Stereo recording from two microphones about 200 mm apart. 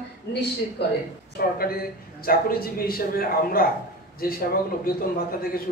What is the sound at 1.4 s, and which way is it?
A man's voice, 50° left (ahead or behind).